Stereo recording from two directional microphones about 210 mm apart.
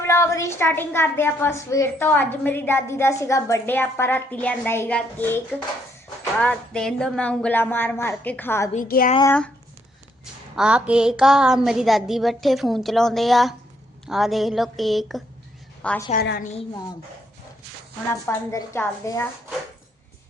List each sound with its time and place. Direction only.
0.0 s a woman's voice: 15° left (ahead or behind)
8.7 s a woman's voice: 40° left (ahead or behind)
10.5 s a woman's voice: 5° right (ahead or behind)
16.1 s a woman's voice: 50° left (ahead or behind)
18.1 s a woman's voice: 10° left (ahead or behind)